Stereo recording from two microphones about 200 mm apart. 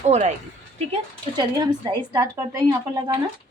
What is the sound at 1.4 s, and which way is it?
A woman's voice, 20° right (ahead or behind).